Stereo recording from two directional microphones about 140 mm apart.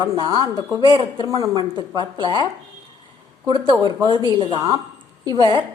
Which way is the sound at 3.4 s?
35° right (ahead or behind).